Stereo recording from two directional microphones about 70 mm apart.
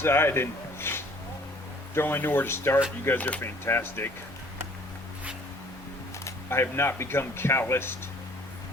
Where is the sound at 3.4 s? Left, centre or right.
Left.